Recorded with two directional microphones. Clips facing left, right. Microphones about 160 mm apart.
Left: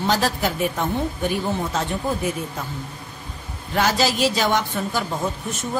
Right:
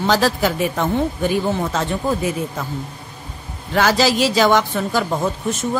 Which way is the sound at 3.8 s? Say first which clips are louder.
Right 4 dB; 90° right.